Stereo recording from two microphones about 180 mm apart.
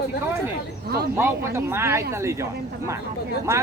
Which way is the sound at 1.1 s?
15° right (ahead or behind).